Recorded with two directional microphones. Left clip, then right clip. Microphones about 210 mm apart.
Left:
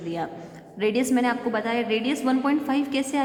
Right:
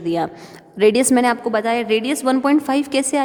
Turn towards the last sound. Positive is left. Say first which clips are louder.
# right 6 dB
turn(degrees=-45)  # may be behind; listen again after turning